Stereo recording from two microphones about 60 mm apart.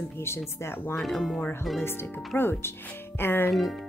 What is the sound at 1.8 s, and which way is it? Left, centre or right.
Speech, left.